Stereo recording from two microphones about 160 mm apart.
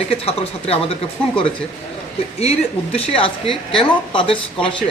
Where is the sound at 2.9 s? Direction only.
35° left (ahead or behind).